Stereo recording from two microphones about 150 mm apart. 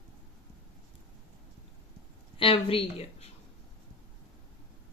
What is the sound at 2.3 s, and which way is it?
Speech, 35° left (ahead or behind).